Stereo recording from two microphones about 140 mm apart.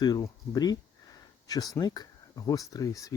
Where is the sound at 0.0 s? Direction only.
30° left (ahead or behind).